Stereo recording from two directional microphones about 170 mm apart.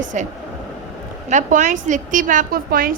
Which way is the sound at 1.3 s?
45° right (ahead or behind).